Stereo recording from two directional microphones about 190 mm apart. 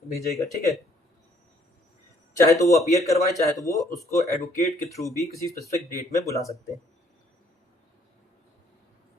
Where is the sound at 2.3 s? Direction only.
15° left (ahead or behind).